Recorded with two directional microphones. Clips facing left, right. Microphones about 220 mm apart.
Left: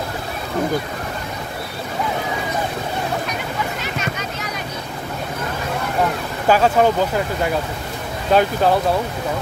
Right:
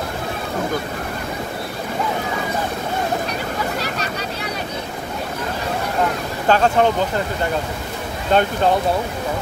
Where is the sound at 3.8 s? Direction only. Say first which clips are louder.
Even; 35° right (ahead or behind).